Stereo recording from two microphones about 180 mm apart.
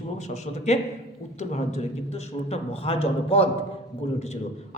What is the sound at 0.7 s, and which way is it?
A man's voice, 40° left (ahead or behind).